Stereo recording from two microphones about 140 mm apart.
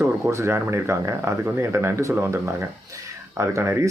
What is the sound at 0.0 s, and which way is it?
Speech, 20° right (ahead or behind).